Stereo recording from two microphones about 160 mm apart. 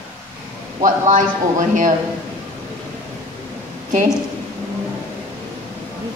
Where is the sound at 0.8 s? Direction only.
50° right (ahead or behind).